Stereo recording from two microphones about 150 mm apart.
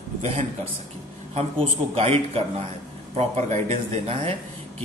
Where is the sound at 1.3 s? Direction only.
40° right (ahead or behind).